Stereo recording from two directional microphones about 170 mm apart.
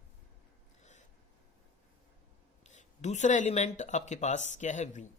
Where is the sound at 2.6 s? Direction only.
45° left (ahead or behind).